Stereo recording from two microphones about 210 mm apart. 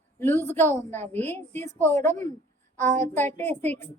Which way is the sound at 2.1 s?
35° right (ahead or behind).